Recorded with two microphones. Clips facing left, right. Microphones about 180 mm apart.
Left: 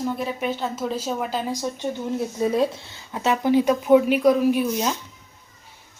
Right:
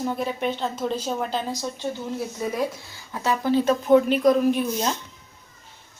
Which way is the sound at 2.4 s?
25° left (ahead or behind).